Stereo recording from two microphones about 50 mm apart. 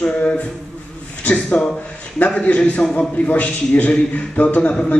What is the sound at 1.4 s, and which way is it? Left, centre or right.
A man's voice, left.